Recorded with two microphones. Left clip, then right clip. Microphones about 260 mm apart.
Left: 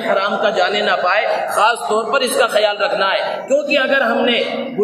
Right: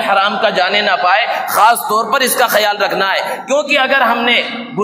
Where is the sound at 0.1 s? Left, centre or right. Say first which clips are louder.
Right 2 dB; right.